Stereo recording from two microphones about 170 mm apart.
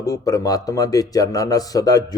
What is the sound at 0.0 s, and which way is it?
A man's voice, 20° left (ahead or behind).